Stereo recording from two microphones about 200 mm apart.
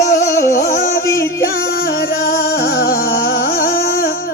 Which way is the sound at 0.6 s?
40° left (ahead or behind).